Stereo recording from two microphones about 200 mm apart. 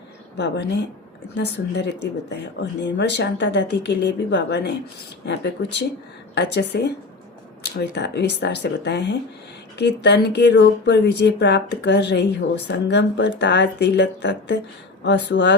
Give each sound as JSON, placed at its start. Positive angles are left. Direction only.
{"t": 0.3, "sound": "speech", "side_deg": 60}
{"t": 2.3, "sound": "speech", "side_deg": 60}